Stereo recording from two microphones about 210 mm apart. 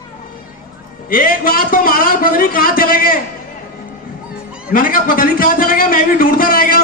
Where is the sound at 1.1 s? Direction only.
45° left (ahead or behind).